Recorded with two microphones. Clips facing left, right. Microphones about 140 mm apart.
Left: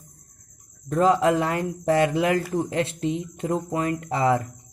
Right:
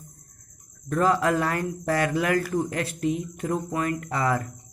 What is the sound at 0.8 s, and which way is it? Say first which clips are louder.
Speech: left 3 dB; 20° left (ahead or behind).